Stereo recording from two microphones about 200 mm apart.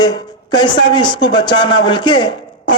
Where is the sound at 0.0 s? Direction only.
20° left (ahead or behind).